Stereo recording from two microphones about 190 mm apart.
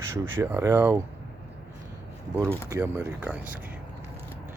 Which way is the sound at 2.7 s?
15° right (ahead or behind).